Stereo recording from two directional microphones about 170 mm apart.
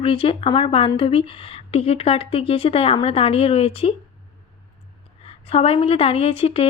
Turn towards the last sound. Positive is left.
turn(degrees=35)  # may be behind; listen again after turning